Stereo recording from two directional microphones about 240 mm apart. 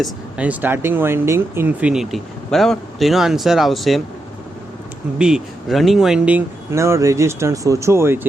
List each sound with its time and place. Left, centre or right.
0.0 s speech: centre
5.1 s speech: centre